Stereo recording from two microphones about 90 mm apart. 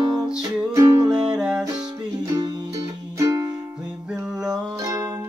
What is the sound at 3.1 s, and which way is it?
Music, 35° right (ahead or behind).